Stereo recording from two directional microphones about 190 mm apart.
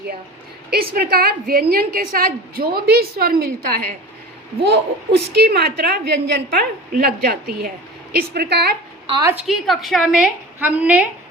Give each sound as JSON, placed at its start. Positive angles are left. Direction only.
{"t": 0.7, "sound": "a woman's voice", "side_deg": -55}
{"t": 9.5, "sound": "a woman's voice", "side_deg": 0}